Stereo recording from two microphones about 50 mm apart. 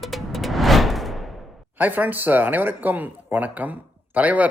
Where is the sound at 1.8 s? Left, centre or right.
Right.